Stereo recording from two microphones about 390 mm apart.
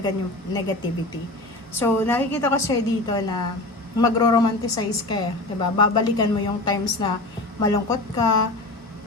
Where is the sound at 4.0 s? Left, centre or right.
Centre.